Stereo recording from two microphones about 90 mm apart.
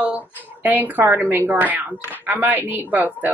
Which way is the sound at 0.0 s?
20° right (ahead or behind).